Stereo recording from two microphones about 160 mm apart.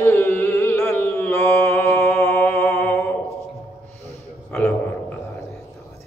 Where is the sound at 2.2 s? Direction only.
15° left (ahead or behind).